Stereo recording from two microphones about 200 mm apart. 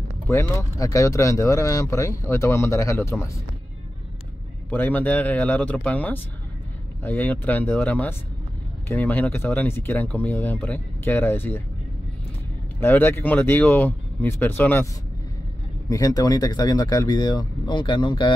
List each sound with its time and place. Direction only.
0.3 s speech: 15° left (ahead or behind)
4.6 s speech: 10° left (ahead or behind)
12.8 s speech: 10° left (ahead or behind)
15.9 s speech: 15° left (ahead or behind)